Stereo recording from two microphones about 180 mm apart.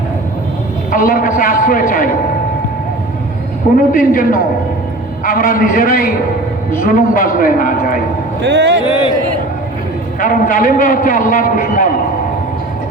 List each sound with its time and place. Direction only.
0.9 s a man's voice: 50° left (ahead or behind)
3.8 s a man's voice: 50° left (ahead or behind)
8.4 s speech: 90° right
10.2 s a man's voice: 50° left (ahead or behind)